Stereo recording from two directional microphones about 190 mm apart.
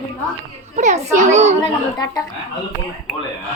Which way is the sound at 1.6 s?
20° left (ahead or behind).